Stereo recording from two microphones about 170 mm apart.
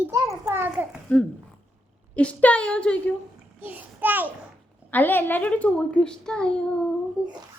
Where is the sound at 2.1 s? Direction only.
10° left (ahead or behind).